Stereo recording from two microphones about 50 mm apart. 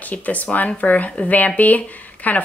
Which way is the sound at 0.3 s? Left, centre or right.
Left.